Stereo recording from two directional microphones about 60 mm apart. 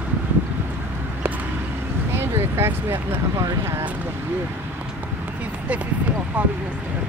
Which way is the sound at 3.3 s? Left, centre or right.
Right.